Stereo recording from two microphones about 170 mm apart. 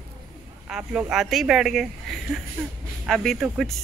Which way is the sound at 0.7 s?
5° right (ahead or behind).